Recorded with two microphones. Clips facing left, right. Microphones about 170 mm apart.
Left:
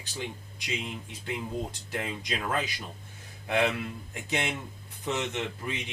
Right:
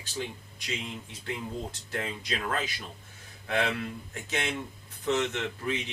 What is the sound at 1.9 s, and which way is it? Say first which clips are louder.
Speech: right 2 dB; 20° left (ahead or behind).